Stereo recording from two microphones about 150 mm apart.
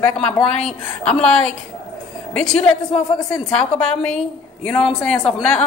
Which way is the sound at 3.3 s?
5° left (ahead or behind).